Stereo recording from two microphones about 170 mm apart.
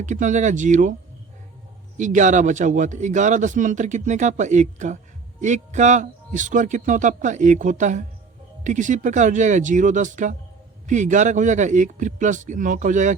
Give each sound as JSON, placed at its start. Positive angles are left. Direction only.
{"t": 0.0, "sound": "a man's voice", "side_deg": -45}
{"t": 2.0, "sound": "a man's voice", "side_deg": -45}